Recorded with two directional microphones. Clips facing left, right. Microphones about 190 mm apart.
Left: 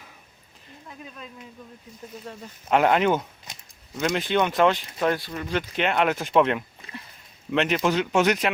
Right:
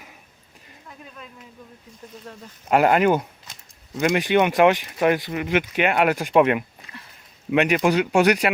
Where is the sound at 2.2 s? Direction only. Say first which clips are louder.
Left 1 dB; 5° left (ahead or behind).